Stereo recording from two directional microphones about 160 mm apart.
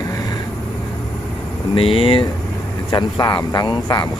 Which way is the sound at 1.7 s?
35° left (ahead or behind).